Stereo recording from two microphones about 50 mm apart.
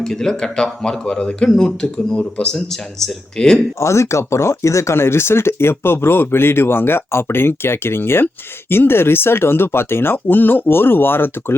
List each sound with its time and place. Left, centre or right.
0.0 s speech: centre
3.8 s speech: left